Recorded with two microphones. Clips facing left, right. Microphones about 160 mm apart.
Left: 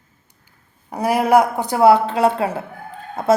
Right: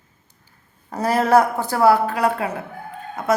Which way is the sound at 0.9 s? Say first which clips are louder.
Left 1 dB; 15° left (ahead or behind).